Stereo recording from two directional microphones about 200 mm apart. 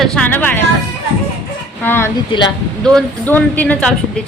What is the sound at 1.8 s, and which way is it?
A woman's voice, 10° left (ahead or behind).